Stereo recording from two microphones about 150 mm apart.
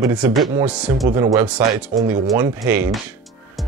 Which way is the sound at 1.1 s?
20° right (ahead or behind).